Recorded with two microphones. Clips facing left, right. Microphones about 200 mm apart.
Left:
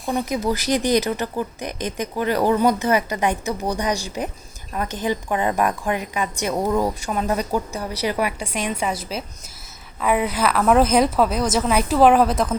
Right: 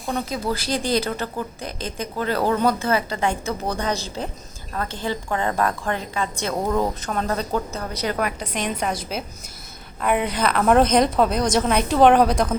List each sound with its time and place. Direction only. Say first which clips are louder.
0.3 s a woman's voice: left 4 dB; 15° left (ahead or behind)